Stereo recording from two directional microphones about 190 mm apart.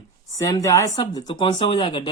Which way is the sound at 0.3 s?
15° left (ahead or behind).